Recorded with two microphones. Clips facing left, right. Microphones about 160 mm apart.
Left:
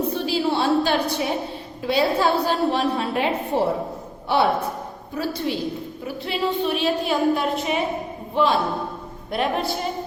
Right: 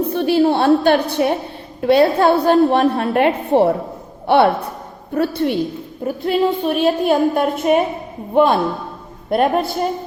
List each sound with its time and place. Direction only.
0.0 s a woman's voice: 55° right (ahead or behind)
6.1 s a woman's voice: 50° right (ahead or behind)
9.3 s a woman's voice: 50° right (ahead or behind)